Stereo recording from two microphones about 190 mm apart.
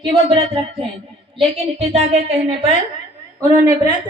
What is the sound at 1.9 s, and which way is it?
Speech, 35° right (ahead or behind).